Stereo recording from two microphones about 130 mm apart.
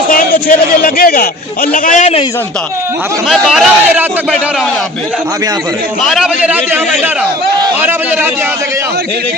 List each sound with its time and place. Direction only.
0.1 s a man's voice: 90° left; by 2.1 s 70° left (ahead or behind)
3.2 s a man's voice: centre (ahead or behind)
6.0 s a man's voice: centre (ahead or behind)
7.8 s a man's voice: 15° right (ahead or behind)